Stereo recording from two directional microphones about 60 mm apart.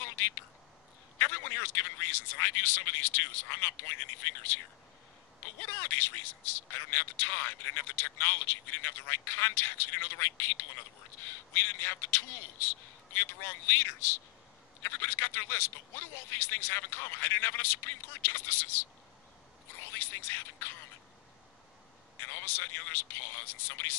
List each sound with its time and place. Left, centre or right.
1.1 s a man's voice: left
5.8 s a man's voice: left
19.9 s a sound: left
22.2 s a man's voice: left